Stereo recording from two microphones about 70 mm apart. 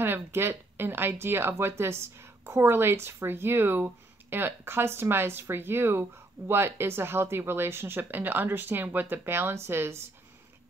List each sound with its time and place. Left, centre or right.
0.0 s speech: right